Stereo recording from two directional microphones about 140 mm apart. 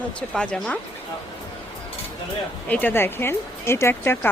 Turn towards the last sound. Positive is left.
turn(degrees=15)  # may be behind; listen again after turning